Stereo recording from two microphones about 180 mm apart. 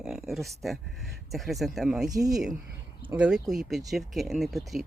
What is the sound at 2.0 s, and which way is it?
Speech, 20° right (ahead or behind).